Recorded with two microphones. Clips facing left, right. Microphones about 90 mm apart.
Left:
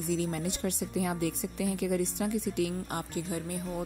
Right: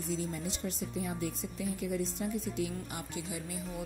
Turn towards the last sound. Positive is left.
turn(degrees=45)  # may be behind; listen again after turning